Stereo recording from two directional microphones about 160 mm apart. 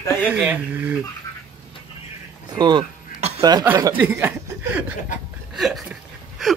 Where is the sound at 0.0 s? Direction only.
15° left (ahead or behind).